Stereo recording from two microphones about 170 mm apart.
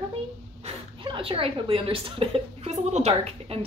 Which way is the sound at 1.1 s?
30° right (ahead or behind).